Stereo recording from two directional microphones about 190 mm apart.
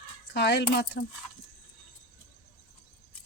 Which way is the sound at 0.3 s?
60° left (ahead or behind).